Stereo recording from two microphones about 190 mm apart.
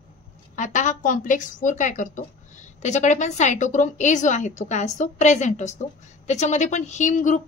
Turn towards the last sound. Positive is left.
turn(degrees=40)  # may be behind; listen again after turning